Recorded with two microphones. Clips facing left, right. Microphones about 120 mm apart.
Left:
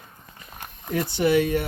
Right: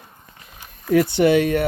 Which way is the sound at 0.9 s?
70° right (ahead or behind).